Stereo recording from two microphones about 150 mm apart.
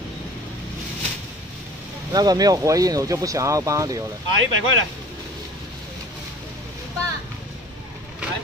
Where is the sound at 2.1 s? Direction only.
25° right (ahead or behind).